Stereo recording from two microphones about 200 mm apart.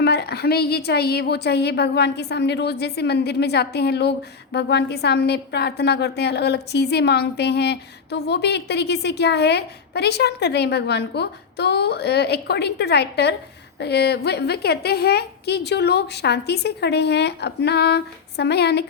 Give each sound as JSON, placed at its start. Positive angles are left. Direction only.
{"t": 0.0, "sound": "a woman's voice", "side_deg": 55}